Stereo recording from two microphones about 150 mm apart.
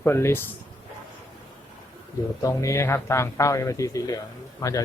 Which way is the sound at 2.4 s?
20° left (ahead or behind).